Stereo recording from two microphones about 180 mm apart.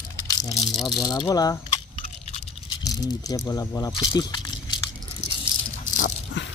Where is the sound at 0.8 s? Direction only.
20° left (ahead or behind).